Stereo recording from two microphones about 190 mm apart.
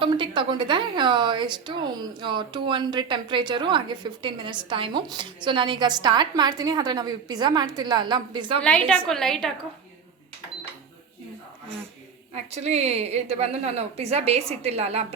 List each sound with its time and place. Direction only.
0.0 s a woman's voice: 25° right (ahead or behind)
8.9 s a woman's voice: centre (ahead or behind)
12.3 s a woman's voice: 35° right (ahead or behind)